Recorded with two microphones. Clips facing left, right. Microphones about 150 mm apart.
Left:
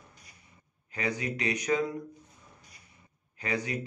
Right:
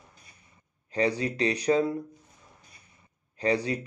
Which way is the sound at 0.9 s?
35° right (ahead or behind).